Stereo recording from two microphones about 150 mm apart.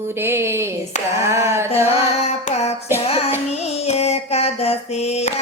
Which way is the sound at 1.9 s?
45° left (ahead or behind).